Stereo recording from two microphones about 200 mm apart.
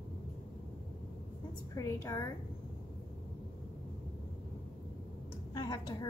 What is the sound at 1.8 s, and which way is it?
Speech, 15° left (ahead or behind).